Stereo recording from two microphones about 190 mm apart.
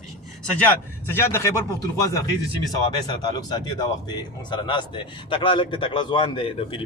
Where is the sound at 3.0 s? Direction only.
20° left (ahead or behind).